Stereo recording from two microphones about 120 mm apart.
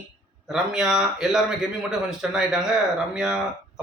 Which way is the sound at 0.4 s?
5° right (ahead or behind).